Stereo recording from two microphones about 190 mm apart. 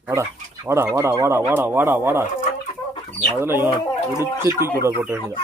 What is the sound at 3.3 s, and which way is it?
Speech, 10° right (ahead or behind).